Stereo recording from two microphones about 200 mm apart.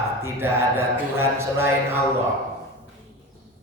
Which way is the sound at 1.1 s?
10° right (ahead or behind).